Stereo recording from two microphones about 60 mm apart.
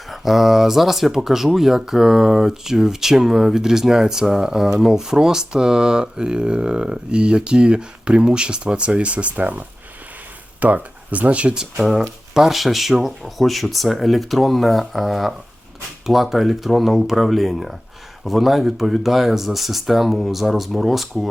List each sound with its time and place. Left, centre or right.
0.1 s speech: centre
11.8 s speech: centre